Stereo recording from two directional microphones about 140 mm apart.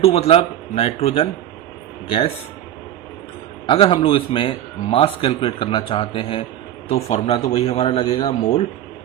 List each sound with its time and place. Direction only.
0.0 s a man's voice: 45° left (ahead or behind)
3.7 s a man's voice: 40° left (ahead or behind)